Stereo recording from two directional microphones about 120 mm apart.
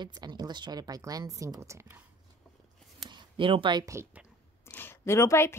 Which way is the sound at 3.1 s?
40° right (ahead or behind).